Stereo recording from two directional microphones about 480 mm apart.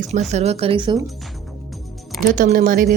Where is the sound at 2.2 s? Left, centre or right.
Centre.